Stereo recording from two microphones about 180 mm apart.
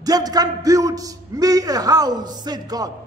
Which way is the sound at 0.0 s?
20° right (ahead or behind).